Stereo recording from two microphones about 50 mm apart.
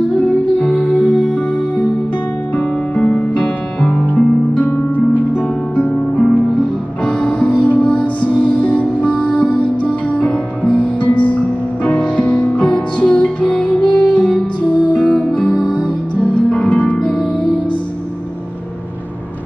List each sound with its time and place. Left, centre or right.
0.8 s music: right
1.1 s music: left
3.2 s music: left